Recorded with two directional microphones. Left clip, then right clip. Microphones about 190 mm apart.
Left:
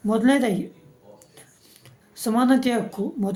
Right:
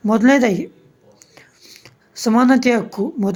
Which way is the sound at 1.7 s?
40° right (ahead or behind).